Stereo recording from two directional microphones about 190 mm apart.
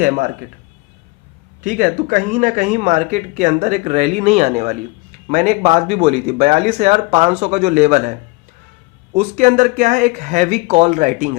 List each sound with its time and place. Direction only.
0.0 s speech: 45° right (ahead or behind)
1.6 s speech: 40° right (ahead or behind)
9.1 s speech: 40° right (ahead or behind)